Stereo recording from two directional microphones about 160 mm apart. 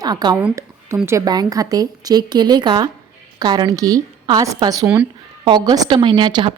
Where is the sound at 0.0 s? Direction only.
25° right (ahead or behind).